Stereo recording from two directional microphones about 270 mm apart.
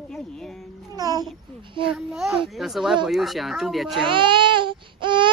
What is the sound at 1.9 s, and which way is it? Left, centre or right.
Speech, centre.